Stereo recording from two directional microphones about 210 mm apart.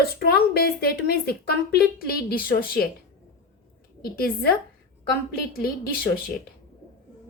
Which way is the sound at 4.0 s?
45° left (ahead or behind).